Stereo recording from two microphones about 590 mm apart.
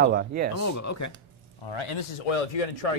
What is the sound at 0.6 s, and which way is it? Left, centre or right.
Speech, left.